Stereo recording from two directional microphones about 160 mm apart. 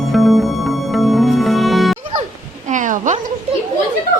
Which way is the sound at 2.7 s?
55° right (ahead or behind).